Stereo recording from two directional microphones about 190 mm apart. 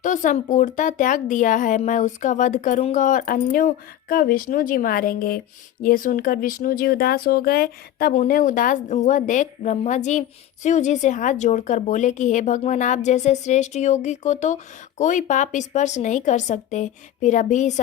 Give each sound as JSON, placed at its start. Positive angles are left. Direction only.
{"t": 0.0, "sound": "speech", "side_deg": 40}